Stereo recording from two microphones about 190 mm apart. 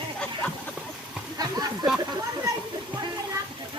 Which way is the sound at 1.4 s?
20° right (ahead or behind).